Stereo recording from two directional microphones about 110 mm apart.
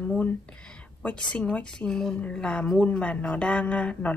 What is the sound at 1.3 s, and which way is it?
A woman's voice, 10° left (ahead or behind).